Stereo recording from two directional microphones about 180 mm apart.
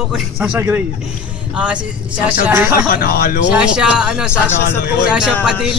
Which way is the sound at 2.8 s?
55° left (ahead or behind).